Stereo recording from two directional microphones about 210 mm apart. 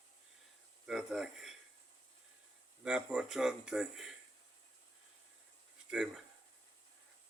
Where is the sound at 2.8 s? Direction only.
5° right (ahead or behind).